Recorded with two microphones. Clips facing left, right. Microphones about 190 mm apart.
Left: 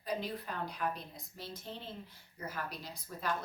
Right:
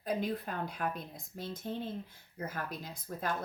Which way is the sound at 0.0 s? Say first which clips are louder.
Right 4 dB; 50° right (ahead or behind).